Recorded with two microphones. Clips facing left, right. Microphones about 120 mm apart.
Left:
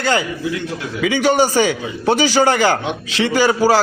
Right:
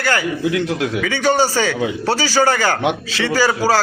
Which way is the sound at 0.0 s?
20° left (ahead or behind).